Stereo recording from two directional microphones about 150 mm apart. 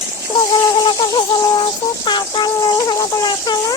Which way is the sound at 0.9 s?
30° left (ahead or behind).